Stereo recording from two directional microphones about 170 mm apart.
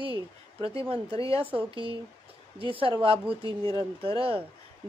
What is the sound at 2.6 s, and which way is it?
Speech, 30° right (ahead or behind).